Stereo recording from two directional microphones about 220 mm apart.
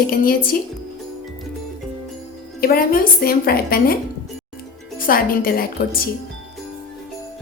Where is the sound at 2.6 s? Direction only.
40° left (ahead or behind).